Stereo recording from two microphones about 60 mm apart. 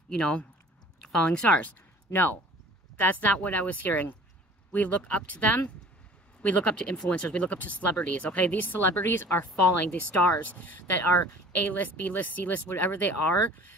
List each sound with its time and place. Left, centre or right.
0.1 s speech: centre; by 9.2 s left
9.8 s speech: left